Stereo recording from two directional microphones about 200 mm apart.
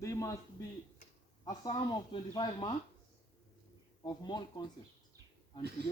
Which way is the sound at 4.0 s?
20° left (ahead or behind).